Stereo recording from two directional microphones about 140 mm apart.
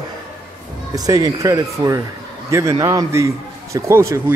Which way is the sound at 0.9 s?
25° right (ahead or behind).